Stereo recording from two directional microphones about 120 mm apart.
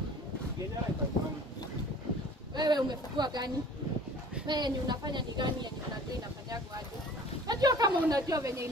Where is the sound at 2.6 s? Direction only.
35° right (ahead or behind).